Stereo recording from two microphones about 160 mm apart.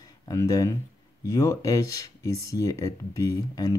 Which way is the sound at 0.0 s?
20° left (ahead or behind).